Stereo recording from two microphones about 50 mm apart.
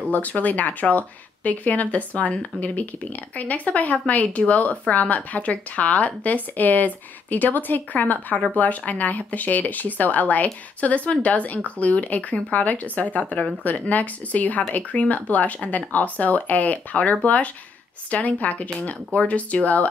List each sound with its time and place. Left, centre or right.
0.1 s a woman's voice: left